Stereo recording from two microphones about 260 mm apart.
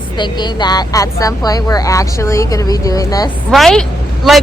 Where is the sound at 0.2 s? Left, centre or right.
Centre.